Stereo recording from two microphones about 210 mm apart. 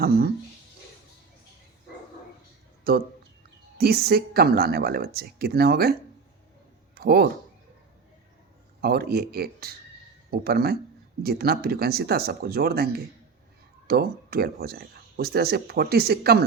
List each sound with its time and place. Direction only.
2.9 s speech: 45° right (ahead or behind)
8.8 s speech: 50° right (ahead or behind)